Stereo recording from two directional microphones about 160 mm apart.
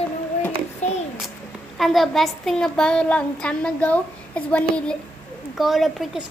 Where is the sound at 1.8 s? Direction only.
Centre (ahead or behind).